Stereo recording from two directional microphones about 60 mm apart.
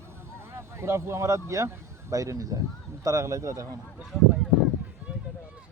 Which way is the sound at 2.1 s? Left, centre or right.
Right.